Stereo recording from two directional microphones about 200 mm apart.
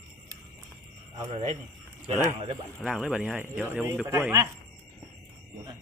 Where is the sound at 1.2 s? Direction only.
30° right (ahead or behind).